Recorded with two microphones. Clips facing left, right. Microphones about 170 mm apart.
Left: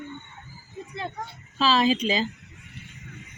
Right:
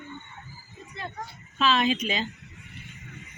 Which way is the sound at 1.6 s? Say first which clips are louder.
Left 2 dB; 35° left (ahead or behind).